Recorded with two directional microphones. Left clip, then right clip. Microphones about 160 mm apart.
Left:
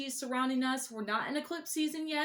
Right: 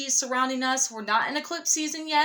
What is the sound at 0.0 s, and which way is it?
A woman's voice, 20° left (ahead or behind).